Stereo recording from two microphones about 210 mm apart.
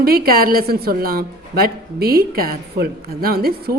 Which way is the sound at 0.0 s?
45° right (ahead or behind).